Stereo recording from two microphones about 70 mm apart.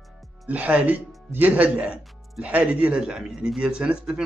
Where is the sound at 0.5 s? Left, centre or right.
Right.